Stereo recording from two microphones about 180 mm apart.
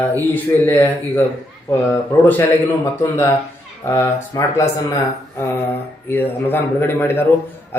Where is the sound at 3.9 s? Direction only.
15° left (ahead or behind).